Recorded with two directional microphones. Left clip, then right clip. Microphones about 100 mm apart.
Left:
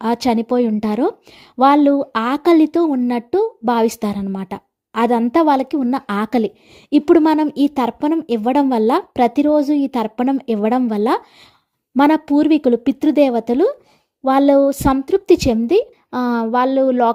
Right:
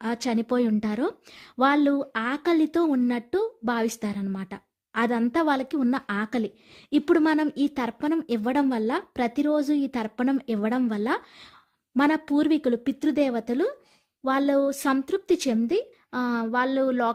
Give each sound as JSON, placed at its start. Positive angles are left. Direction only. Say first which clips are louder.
{"t": 0.0, "sound": "a woman's voice", "louder": "left 10 dB", "side_deg": 45}
{"t": 0.4, "sound": "speech", "louder": "left 8 dB", "side_deg": 20}
{"t": 0.8, "sound": "speech", "louder": "left 9 dB", "side_deg": 35}
{"t": 2.1, "sound": "speech", "louder": "left 10 dB", "side_deg": 40}
{"t": 2.6, "sound": "speech", "louder": "left 7 dB", "side_deg": 15}
{"t": 3.7, "sound": "a woman's voice", "louder": "left 11 dB", "side_deg": 45}
{"t": 4.4, "sound": "a woman's voice", "louder": "left 10 dB", "side_deg": 35}
{"t": 5.9, "sound": "speech", "louder": "left 9 dB", "side_deg": 40}
{"t": 6.9, "sound": "speech", "louder": "left 9 dB", "side_deg": 30}
{"t": 8.7, "sound": "speech", "louder": "left 11 dB", "side_deg": 45}
{"t": 12.2, "sound": "a woman's voice", "louder": "left 9 dB", "side_deg": 25}
{"t": 16.7, "sound": "speech", "louder": "left 10 dB", "side_deg": 25}